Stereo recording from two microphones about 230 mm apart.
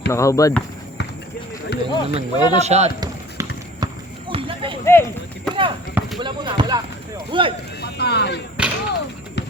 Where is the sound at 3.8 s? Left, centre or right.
Right.